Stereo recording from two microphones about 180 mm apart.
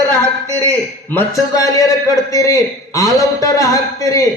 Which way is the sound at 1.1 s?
15° left (ahead or behind).